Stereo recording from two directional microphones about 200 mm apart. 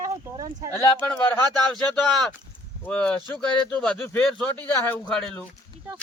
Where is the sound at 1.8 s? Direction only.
5° left (ahead or behind).